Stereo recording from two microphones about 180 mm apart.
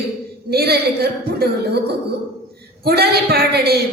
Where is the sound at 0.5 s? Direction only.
60° right (ahead or behind).